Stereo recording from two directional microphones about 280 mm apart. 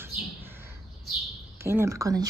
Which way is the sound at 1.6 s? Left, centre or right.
Centre.